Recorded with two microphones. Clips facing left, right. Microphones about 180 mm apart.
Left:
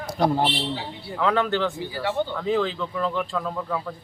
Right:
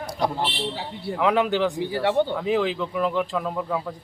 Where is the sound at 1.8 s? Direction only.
65° right (ahead or behind).